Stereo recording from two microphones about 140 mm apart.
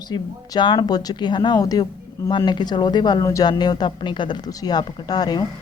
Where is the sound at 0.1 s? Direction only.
35° left (ahead or behind).